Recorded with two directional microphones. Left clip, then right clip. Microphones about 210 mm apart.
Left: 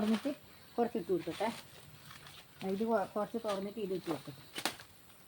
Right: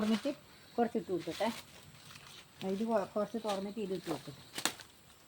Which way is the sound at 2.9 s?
20° right (ahead or behind).